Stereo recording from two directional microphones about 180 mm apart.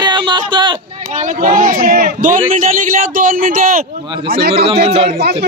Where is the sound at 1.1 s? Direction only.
45° right (ahead or behind).